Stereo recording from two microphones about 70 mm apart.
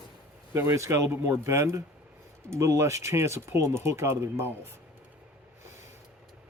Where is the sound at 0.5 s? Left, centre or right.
Right.